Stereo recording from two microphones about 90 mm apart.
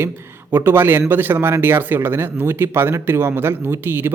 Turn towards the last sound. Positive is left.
turn(degrees=-25)  # may be behind; listen again after turning